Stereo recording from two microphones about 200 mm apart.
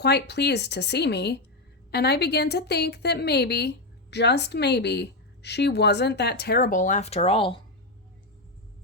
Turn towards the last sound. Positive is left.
turn(degrees=25)  # may be behind; listen again after turning